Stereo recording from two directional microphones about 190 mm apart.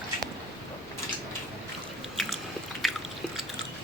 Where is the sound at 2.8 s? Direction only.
Centre (ahead or behind).